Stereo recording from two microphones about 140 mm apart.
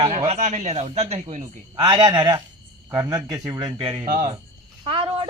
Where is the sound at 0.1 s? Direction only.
50° right (ahead or behind).